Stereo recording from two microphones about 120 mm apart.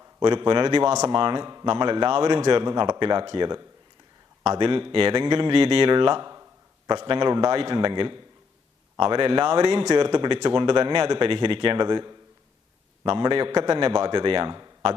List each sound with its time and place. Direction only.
0.2 s speech: 40° right (ahead or behind)
4.4 s speech: 50° right (ahead or behind)
6.2 s a sound: 25° right (ahead or behind)
6.8 s speech: 40° right (ahead or behind); by 9.8 s 55° right (ahead or behind)
9.9 s speech: 40° right (ahead or behind)